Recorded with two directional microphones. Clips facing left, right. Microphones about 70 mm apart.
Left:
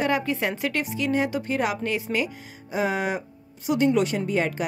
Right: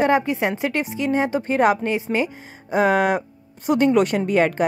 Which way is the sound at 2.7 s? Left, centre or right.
Right.